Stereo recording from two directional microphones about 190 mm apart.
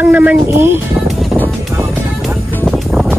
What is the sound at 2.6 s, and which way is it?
Music, centre (ahead or behind).